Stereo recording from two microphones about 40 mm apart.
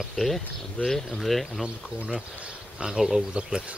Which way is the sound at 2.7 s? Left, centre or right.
Centre.